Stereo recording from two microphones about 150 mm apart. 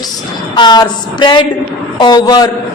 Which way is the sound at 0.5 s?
30° left (ahead or behind).